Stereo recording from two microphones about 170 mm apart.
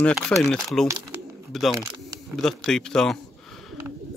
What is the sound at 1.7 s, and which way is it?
Camera, 20° right (ahead or behind).